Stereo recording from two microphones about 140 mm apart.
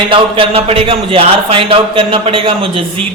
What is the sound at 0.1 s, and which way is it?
A man's voice, 40° right (ahead or behind).